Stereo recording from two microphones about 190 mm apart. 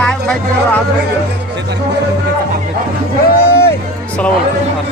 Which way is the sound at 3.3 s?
55° left (ahead or behind).